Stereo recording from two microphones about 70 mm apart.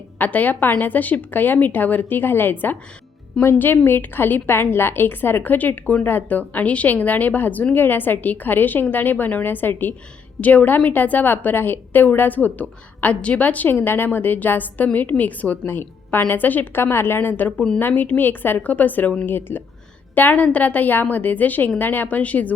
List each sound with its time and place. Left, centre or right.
0.2 s a woman's voice: left
3.3 s a woman's voice: centre
3.8 s a woman's voice: left